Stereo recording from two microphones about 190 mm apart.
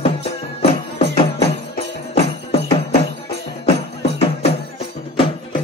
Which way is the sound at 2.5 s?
30° left (ahead or behind).